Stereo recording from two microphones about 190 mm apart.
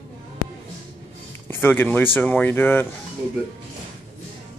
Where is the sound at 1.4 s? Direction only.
10° left (ahead or behind).